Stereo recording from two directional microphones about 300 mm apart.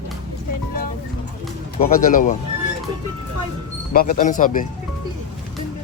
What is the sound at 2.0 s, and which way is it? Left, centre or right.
Speech, left.